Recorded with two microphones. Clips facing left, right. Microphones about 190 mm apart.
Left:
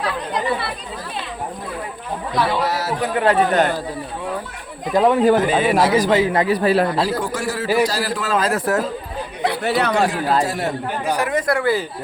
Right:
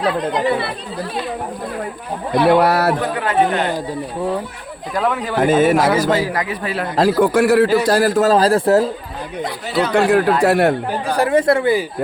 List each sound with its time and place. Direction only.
2.3 s a man's voice: 60° right (ahead or behind)
3.2 s speech: 40° left (ahead or behind)
4.9 s a man's voice: 25° left (ahead or behind)
5.4 s a man's voice: 45° right (ahead or behind)
6.1 s a man's voice: 25° left (ahead or behind)
6.9 s a man's voice: 50° right (ahead or behind); by 8.8 s 30° right (ahead or behind)
9.4 s speech: 65° left (ahead or behind)
9.9 s a man's voice: 60° right (ahead or behind)
11.2 s speech: 30° right (ahead or behind)